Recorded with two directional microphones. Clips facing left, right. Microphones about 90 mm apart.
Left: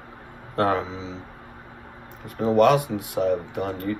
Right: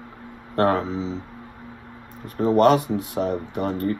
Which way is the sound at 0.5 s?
45° right (ahead or behind).